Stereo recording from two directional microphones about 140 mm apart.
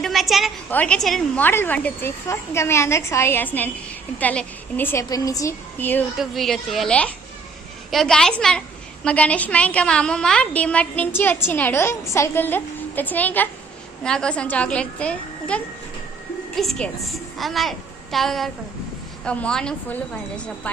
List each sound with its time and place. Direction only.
0.0 s a sound: centre (ahead or behind)
0.7 s a woman's voice: 10° left (ahead or behind)
1.4 s a woman's voice: 15° left (ahead or behind)
6.1 s a woman's voice: centre (ahead or behind)